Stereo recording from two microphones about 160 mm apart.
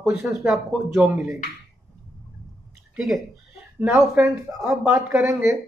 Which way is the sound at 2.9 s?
Centre (ahead or behind).